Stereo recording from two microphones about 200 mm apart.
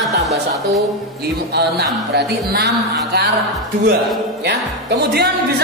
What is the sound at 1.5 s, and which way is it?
Music, 55° right (ahead or behind).